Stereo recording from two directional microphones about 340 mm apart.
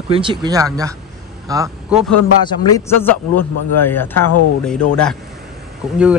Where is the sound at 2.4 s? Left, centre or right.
Centre.